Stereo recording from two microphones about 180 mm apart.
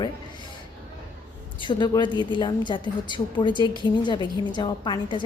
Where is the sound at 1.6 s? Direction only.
25° left (ahead or behind).